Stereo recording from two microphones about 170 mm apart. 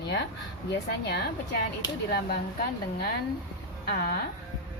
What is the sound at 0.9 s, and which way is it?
Speech, 75° left (ahead or behind).